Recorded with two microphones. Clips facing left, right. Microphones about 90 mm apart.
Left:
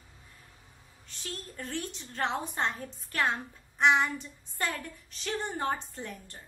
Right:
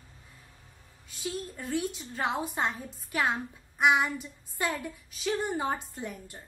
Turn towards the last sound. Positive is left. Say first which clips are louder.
# right 2 dB
turn(degrees=-10)  # may be behind; listen again after turning